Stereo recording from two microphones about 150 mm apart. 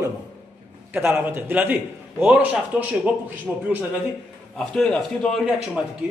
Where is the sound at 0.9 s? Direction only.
15° right (ahead or behind).